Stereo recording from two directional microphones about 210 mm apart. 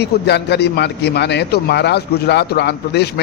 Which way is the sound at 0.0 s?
55° left (ahead or behind).